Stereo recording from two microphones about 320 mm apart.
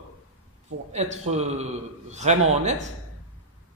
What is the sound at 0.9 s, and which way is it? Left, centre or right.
Speech, right.